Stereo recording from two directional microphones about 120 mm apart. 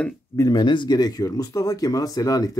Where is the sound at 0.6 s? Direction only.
40° left (ahead or behind).